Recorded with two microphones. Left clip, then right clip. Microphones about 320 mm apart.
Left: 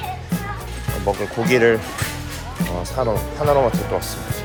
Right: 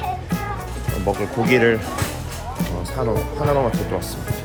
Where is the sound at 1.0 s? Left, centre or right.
Centre.